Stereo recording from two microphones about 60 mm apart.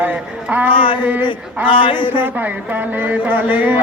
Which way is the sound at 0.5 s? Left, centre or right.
Right.